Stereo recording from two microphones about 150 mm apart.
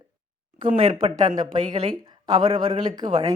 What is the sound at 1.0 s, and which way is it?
Speech, 50° right (ahead or behind).